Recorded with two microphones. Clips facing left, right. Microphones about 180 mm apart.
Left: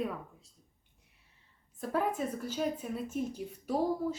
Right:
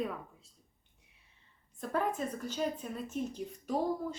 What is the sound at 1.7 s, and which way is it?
A woman's voice, 5° left (ahead or behind).